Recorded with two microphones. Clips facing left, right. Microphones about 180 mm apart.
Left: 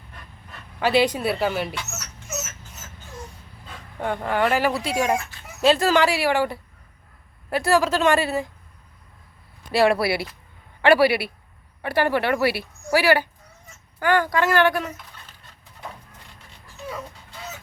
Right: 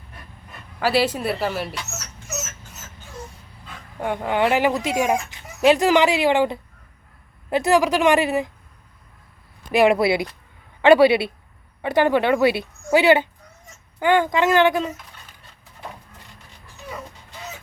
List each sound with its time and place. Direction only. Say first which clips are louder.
0.5 s speech: even; 5° right (ahead or behind)
4.0 s a woman's voice: right 2 dB; 10° right (ahead or behind)
9.7 s speech: right 3 dB; 20° right (ahead or behind)